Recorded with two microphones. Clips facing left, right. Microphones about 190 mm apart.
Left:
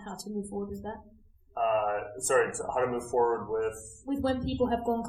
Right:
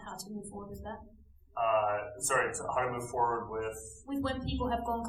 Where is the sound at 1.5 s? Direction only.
40° left (ahead or behind).